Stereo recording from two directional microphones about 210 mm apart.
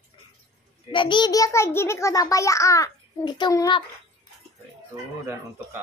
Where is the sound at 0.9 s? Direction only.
20° left (ahead or behind).